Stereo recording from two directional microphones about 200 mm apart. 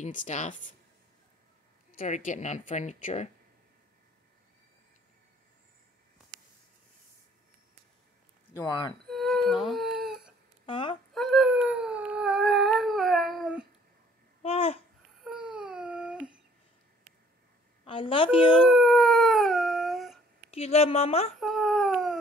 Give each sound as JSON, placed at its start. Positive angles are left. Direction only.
{"t": 0.0, "sound": "speech", "side_deg": 40}
{"t": 1.9, "sound": "speech", "side_deg": 40}
{"t": 8.5, "sound": "a woman's voice", "side_deg": 20}
{"t": 9.0, "sound": "music", "side_deg": 0}
{"t": 10.6, "sound": "a sound", "side_deg": 25}
{"t": 11.1, "sound": "a sound", "side_deg": 0}
{"t": 14.4, "sound": "babbling", "side_deg": 30}
{"t": 15.2, "sound": "a sound", "side_deg": -5}
{"t": 17.8, "sound": "a woman's voice", "side_deg": 25}
{"t": 18.7, "sound": "howl", "side_deg": 0}
{"t": 20.5, "sound": "speech", "side_deg": 30}
{"t": 21.4, "sound": "a sound", "side_deg": 0}